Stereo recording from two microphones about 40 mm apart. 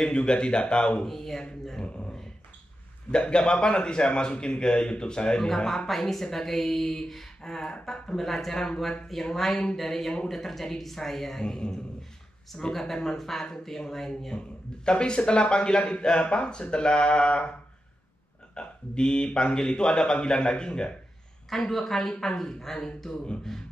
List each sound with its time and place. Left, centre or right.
0.0 s a man's voice: left
1.0 s speech: centre
3.1 s a man's voice: left
5.9 s speech: centre
11.4 s a man's voice: centre
14.9 s a man's voice: left
18.5 s a man's voice: left
21.5 s speech: centre